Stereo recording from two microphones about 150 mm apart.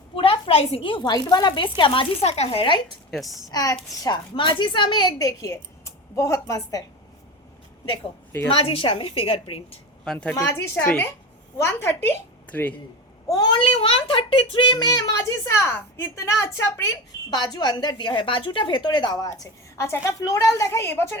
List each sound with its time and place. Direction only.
0.2 s a woman's voice: 35° left (ahead or behind)
3.1 s a woman's voice: centre (ahead or behind)
3.5 s a woman's voice: 25° left (ahead or behind)
8.5 s a woman's voice: 40° left (ahead or behind)
10.0 s a woman's voice: 5° left (ahead or behind)
10.3 s a woman's voice: 20° left (ahead or behind)
13.2 s a woman's voice: 25° left (ahead or behind)
17.3 s a woman's voice: 30° left (ahead or behind)